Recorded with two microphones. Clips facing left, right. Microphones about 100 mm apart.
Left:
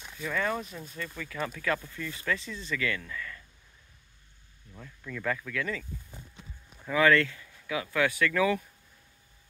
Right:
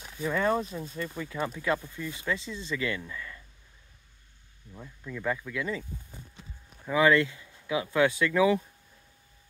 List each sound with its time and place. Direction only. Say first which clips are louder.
0.2 s speech: right 4 dB; 30° right (ahead or behind)
4.7 s speech: right 1 dB; 15° right (ahead or behind)
6.9 s speech: right 1 dB; 20° right (ahead or behind)